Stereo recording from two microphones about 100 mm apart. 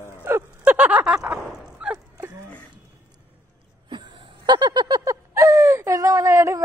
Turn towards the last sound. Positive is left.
turn(degrees=-30)  # may be behind; listen again after turning